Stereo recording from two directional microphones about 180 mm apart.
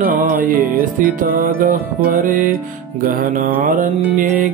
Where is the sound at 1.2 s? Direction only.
50° right (ahead or behind).